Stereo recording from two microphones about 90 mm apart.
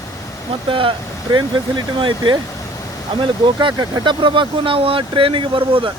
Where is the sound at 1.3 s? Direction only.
60° right (ahead or behind).